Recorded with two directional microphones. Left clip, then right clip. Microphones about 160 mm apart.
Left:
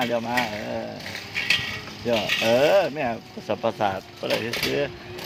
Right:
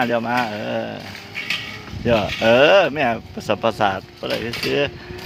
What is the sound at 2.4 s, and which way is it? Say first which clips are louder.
Speech: right 7 dB; 45° right (ahead or behind).